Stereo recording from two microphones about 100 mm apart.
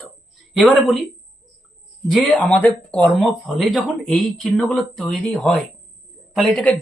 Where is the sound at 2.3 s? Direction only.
15° left (ahead or behind).